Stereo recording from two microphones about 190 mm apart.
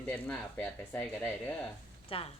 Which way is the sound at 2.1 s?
30° left (ahead or behind).